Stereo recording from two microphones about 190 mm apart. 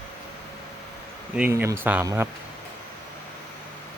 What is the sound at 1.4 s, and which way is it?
Speech, 10° right (ahead or behind).